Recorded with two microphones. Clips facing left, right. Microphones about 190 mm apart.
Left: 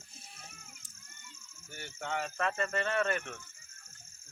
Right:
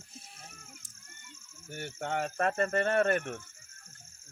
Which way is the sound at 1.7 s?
50° right (ahead or behind).